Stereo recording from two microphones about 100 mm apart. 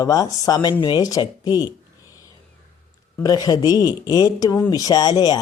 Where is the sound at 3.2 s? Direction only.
40° left (ahead or behind).